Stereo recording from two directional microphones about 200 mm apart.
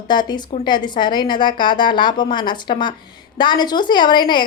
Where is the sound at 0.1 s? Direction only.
20° left (ahead or behind).